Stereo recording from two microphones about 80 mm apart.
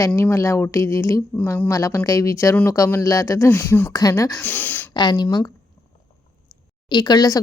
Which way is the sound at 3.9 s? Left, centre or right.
Left.